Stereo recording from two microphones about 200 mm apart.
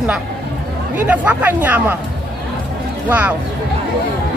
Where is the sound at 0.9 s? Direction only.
5° right (ahead or behind).